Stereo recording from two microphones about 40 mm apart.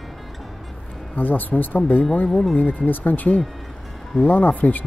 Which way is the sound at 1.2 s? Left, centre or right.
Left.